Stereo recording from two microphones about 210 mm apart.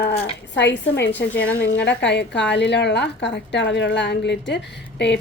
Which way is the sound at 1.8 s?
55° left (ahead or behind).